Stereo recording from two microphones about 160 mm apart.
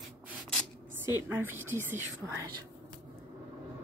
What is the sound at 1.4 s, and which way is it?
Speech, 15° right (ahead or behind).